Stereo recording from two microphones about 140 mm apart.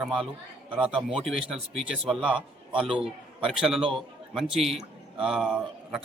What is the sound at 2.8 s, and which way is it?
Speech, 40° right (ahead or behind).